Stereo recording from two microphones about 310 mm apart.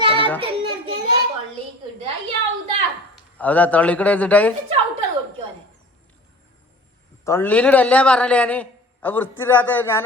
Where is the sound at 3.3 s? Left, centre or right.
Centre.